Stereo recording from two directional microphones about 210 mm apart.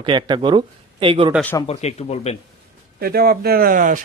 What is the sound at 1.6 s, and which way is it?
Speech, 30° left (ahead or behind).